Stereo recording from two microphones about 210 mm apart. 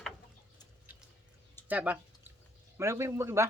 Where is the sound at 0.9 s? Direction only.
10° right (ahead or behind).